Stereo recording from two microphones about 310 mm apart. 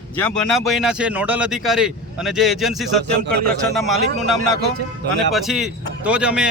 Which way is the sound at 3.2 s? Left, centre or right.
Right.